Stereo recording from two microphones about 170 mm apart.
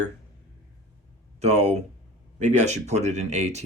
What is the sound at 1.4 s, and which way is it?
Speech, 40° right (ahead or behind).